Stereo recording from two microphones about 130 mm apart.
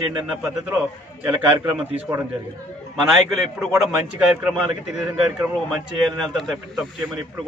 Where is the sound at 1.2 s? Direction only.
20° right (ahead or behind).